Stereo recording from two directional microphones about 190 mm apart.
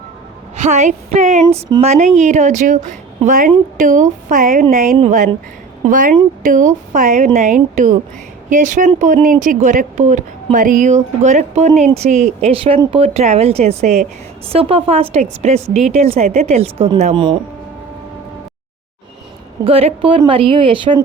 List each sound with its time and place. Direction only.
0.5 s a woman's voice: 40° right (ahead or behind)
19.6 s a woman's voice: 30° right (ahead or behind)